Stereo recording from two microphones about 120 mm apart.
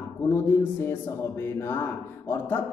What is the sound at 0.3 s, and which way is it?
Speech, 20° left (ahead or behind).